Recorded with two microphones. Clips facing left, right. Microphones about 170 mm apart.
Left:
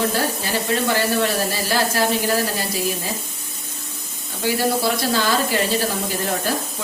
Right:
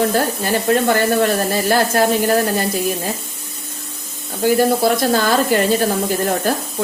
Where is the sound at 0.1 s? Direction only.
50° right (ahead or behind).